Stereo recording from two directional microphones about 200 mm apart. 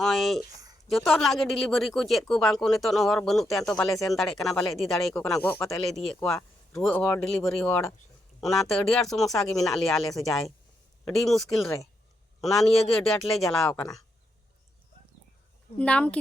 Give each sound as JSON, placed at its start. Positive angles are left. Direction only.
{"t": 0.0, "sound": "speech", "side_deg": 0}
{"t": 15.8, "sound": "speech", "side_deg": 5}